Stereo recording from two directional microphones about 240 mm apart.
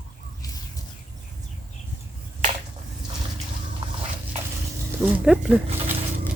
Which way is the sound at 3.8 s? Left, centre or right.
Right.